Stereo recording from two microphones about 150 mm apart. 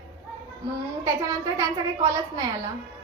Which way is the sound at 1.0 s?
20° right (ahead or behind).